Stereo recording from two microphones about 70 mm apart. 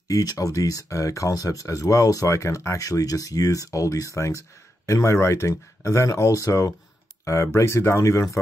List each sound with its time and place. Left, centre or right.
0.1 s speech: left